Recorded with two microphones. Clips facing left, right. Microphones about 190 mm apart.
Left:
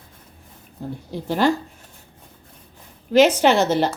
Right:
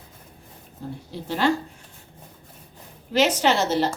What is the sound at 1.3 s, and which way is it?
Speech, 45° left (ahead or behind).